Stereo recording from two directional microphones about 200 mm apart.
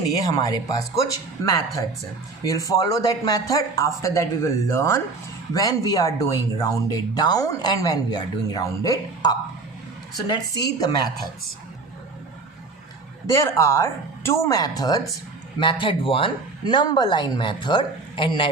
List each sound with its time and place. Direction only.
0.3 s speech: 20° left (ahead or behind)
2.4 s speech: 15° left (ahead or behind)
13.2 s speech: 15° left (ahead or behind)